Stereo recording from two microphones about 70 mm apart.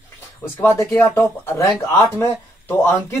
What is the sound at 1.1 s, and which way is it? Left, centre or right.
Speech, left.